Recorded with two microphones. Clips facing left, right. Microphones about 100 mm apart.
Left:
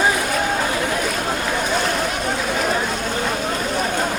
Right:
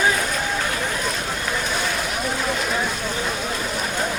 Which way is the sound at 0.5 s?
35° left (ahead or behind).